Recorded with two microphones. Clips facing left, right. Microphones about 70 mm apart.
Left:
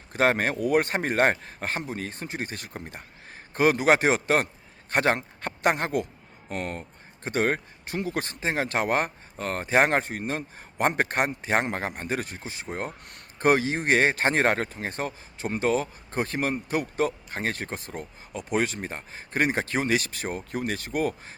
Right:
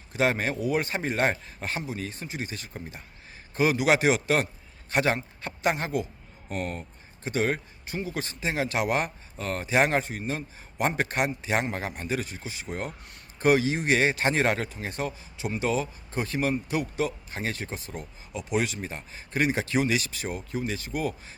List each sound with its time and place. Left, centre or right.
0.1 s a man's voice: left
7.9 s a man's voice: left
13.1 s a man's voice: left